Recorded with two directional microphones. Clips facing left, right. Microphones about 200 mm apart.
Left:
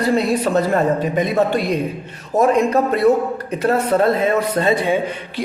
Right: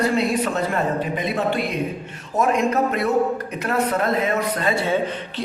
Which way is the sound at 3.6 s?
30° left (ahead or behind).